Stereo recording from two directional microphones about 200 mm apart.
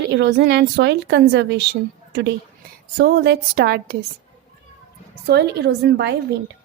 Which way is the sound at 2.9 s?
50° right (ahead or behind).